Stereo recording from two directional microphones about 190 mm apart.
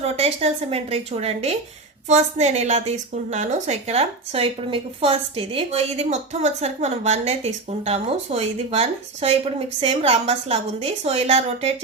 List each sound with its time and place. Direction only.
0.0 s a woman's voice: 30° right (ahead or behind)